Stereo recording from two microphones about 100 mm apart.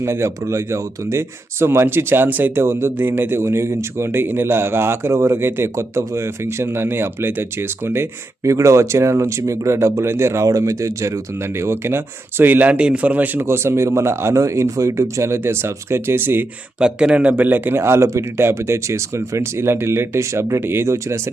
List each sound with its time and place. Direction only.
0.0 s speech: 25° right (ahead or behind)
16.8 s speech: 10° right (ahead or behind); by 21.2 s 30° right (ahead or behind)